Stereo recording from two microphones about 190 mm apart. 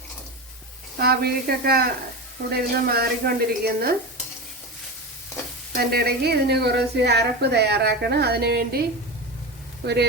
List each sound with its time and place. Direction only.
0.9 s a woman's voice: 55° right (ahead or behind)
5.7 s a woman's voice: 55° right (ahead or behind)
9.8 s a woman's voice: 60° right (ahead or behind)